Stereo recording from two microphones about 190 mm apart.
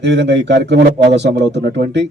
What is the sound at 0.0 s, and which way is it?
Speech, 65° right (ahead or behind).